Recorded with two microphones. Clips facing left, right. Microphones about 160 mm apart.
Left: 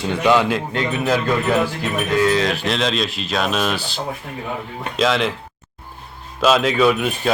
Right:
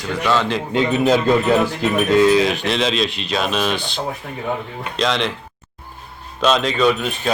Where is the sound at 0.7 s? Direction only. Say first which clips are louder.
Right 4 dB; 20° right (ahead or behind).